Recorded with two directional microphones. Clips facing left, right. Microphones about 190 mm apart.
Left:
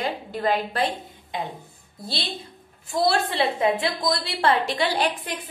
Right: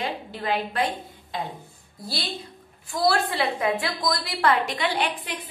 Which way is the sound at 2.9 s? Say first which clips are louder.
Left 1 dB; 25° left (ahead or behind).